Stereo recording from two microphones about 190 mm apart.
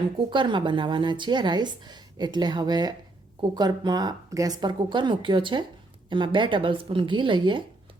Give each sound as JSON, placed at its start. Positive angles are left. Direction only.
{"t": 0.3, "sound": "a woman's voice", "side_deg": -25}